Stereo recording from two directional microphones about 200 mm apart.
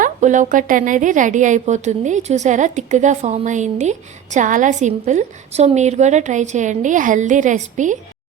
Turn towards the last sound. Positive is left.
turn(degrees=-40)  # may be behind; listen again after turning